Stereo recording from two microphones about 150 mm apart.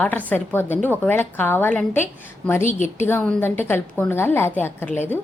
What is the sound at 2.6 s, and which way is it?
Speech, 55° left (ahead or behind).